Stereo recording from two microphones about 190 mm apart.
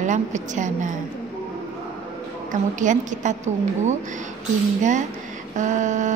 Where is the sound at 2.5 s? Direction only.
40° right (ahead or behind).